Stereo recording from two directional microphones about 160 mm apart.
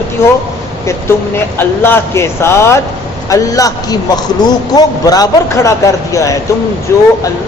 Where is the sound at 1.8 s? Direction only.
15° left (ahead or behind).